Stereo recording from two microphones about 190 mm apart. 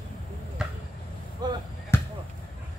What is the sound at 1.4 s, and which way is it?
Basketball bounce, 20° right (ahead or behind).